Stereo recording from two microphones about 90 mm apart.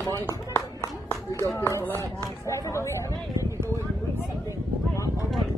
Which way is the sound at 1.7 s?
30° left (ahead or behind).